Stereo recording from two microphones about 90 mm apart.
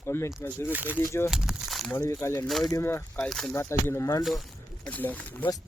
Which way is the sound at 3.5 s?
30° left (ahead or behind).